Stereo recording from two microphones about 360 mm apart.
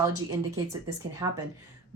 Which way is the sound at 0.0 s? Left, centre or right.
Centre.